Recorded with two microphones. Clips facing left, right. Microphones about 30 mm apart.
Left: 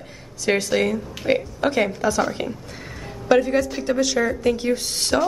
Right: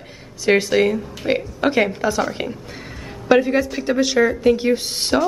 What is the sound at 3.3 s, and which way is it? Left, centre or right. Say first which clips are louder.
A woman's voice: right 2 dB; centre.